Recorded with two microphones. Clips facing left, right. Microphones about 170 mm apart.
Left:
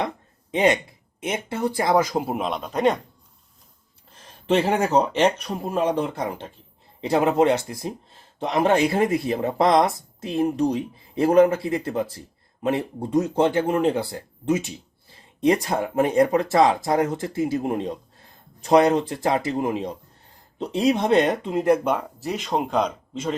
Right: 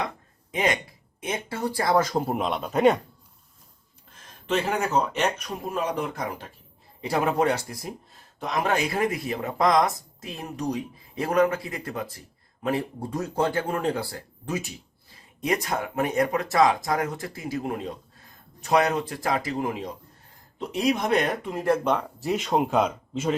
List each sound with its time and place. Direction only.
0.5 s speech: 25° left (ahead or behind); by 3.0 s 5° right (ahead or behind)
4.1 s speech: 35° left (ahead or behind)
21.8 s speech: centre (ahead or behind)